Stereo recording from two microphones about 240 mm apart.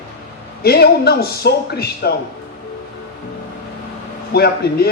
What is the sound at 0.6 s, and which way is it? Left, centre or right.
A man's voice, left.